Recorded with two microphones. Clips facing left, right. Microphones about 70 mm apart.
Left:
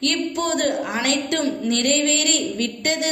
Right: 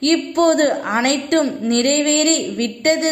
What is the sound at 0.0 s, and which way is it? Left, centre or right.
A woman's voice, right.